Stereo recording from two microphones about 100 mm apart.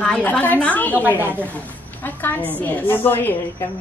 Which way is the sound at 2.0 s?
20° left (ahead or behind).